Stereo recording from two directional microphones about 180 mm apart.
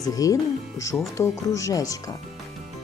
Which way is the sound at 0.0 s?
20° left (ahead or behind).